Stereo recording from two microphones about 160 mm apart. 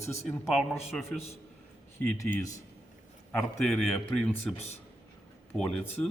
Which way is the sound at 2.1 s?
20° left (ahead or behind).